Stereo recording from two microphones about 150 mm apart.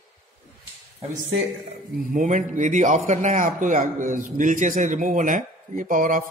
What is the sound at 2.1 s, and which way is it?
Speech, 60° right (ahead or behind).